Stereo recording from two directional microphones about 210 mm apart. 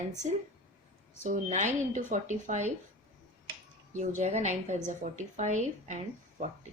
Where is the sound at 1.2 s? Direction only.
35° right (ahead or behind).